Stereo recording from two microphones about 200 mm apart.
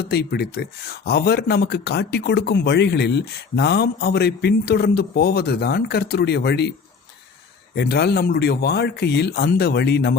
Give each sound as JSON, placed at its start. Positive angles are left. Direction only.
{"t": 0.1, "sound": "speech", "side_deg": 55}
{"t": 7.8, "sound": "speech", "side_deg": 55}